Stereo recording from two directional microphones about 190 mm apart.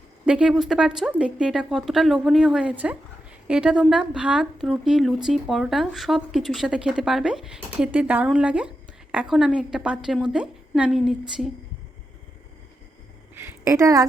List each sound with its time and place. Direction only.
0.3 s a woman's voice: 5° right (ahead or behind)
13.3 s a woman's voice: 15° right (ahead or behind)